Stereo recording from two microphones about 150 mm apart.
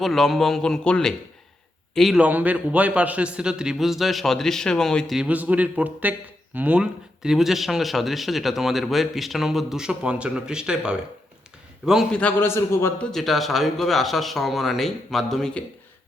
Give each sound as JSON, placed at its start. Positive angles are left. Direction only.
{"t": 0.0, "sound": "a man's voice", "side_deg": 0}
{"t": 12.2, "sound": "a man's voice", "side_deg": 15}
{"t": 13.1, "sound": "a man's voice", "side_deg": 0}